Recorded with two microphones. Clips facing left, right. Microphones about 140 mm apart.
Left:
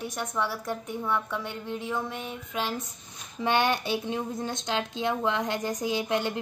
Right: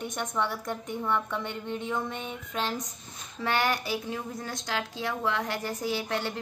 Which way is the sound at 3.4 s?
20° left (ahead or behind).